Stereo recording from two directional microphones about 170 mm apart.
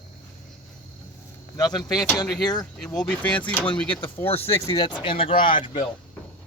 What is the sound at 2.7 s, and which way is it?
Speech, 5° left (ahead or behind).